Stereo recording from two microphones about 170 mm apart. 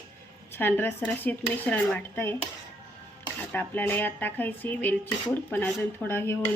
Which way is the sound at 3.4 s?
10° left (ahead or behind).